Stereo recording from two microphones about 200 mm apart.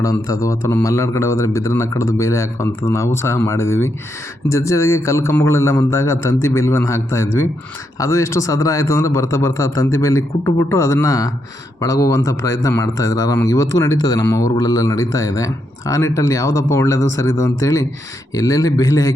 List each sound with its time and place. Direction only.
0.0 s speech: 15° left (ahead or behind)